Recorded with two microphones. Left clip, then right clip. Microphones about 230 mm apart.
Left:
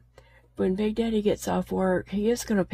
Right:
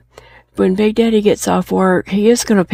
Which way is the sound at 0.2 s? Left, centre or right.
Right.